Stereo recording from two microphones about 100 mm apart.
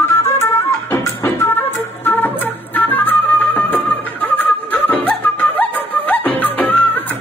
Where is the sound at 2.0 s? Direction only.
20° left (ahead or behind).